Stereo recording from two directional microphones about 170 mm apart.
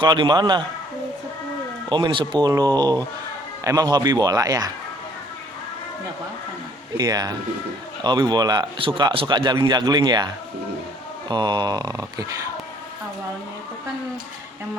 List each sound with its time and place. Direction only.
0.0 s speech: 25° right (ahead or behind)
1.9 s speech: 30° right (ahead or behind)
6.9 s speech: 20° right (ahead or behind)
11.3 s speech: 25° right (ahead or behind)